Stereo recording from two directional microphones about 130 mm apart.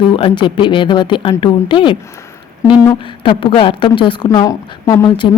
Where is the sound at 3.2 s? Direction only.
40° left (ahead or behind).